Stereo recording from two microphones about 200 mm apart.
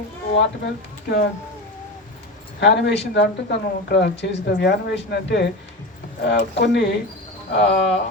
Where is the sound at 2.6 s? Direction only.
60° left (ahead or behind).